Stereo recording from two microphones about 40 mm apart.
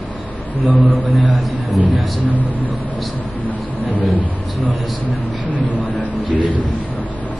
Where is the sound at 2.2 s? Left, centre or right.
Left.